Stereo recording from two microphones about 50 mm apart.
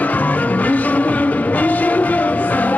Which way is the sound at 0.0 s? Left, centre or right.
Left.